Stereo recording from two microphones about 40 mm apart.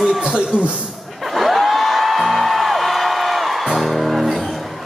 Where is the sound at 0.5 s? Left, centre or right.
Left.